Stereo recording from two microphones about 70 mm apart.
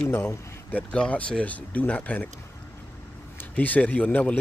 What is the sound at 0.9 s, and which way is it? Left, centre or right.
Speech, centre.